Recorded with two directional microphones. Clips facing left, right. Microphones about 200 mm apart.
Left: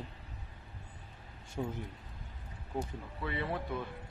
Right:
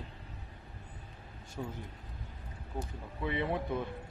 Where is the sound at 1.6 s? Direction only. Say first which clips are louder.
Left 3 dB; 20° left (ahead or behind).